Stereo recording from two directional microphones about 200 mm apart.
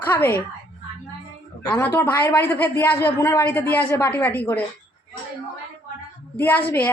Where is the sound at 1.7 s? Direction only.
10° left (ahead or behind).